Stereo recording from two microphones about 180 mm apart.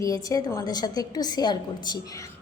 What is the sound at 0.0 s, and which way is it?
A woman's voice, 20° left (ahead or behind).